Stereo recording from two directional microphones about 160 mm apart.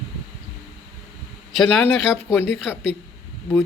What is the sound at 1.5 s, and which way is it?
A man's voice, 5° left (ahead or behind).